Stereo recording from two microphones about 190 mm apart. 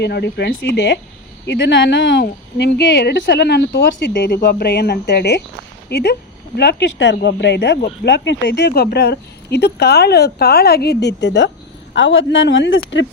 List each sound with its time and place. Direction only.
0.0 s a man's voice: 60° left (ahead or behind); by 13.1 s 75° left (ahead or behind)